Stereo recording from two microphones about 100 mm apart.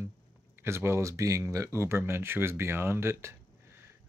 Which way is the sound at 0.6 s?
25° right (ahead or behind).